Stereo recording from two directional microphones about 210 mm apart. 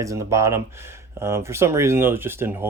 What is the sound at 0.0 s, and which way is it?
Speech, 15° right (ahead or behind).